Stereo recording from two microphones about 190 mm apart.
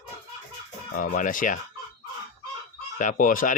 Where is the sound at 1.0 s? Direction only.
45° left (ahead or behind).